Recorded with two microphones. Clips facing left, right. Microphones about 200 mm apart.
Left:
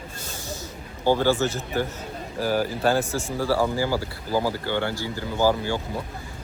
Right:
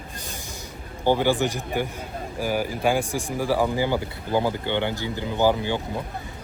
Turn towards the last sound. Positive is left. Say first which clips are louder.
# right 1 dB
turn(degrees=-20)  # may be behind; listen again after turning